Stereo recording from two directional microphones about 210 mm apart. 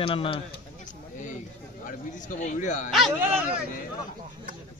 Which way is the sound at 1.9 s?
35° left (ahead or behind).